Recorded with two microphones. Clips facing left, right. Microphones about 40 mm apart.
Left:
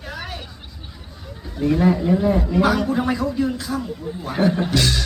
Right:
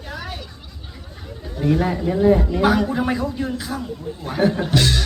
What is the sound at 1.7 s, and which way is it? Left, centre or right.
Speech, centre.